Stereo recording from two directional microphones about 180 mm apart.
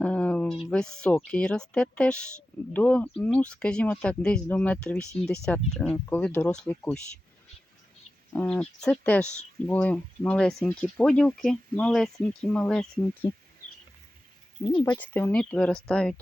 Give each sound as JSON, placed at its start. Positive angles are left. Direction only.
{"t": 0.0, "sound": "a sound", "side_deg": 5}
{"t": 0.6, "sound": "speech", "side_deg": 5}
{"t": 8.3, "sound": "speech", "side_deg": 10}
{"t": 13.2, "sound": "speech", "side_deg": 25}
{"t": 14.8, "sound": "speech", "side_deg": 10}